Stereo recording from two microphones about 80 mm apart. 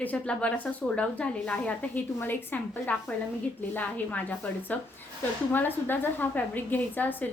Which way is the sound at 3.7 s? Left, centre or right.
Left.